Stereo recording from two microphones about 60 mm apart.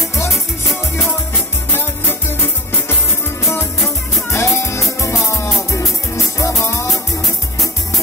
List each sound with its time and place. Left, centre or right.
1.7 s music: left
4.3 s music: left